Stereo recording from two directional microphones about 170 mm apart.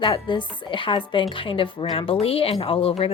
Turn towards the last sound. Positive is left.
turn(degrees=35)  # may be behind; listen again after turning